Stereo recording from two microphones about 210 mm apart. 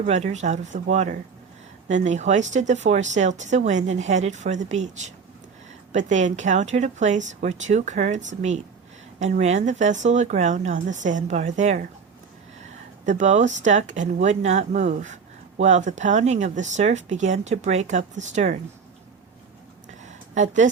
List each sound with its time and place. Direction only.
0.0 s speech: 35° right (ahead or behind)
13.1 s speech: 35° right (ahead or behind)
19.9 s a sound: 35° right (ahead or behind)